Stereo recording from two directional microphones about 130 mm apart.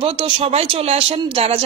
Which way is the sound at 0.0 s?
45° right (ahead or behind).